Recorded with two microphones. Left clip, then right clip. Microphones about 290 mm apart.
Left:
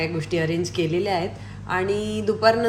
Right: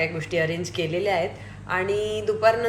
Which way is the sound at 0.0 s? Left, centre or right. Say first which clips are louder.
Right 1 dB; centre.